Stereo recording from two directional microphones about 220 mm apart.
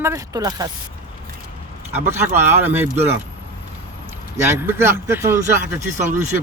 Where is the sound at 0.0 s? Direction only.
15° right (ahead or behind).